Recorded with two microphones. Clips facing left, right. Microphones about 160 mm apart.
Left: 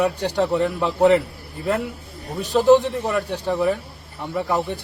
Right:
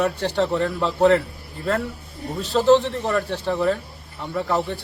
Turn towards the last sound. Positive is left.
turn(degrees=15)  # may be behind; listen again after turning